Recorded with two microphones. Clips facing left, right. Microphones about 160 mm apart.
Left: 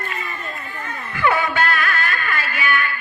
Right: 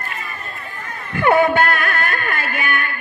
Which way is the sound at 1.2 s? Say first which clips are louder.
Right 5 dB; 55° right (ahead or behind).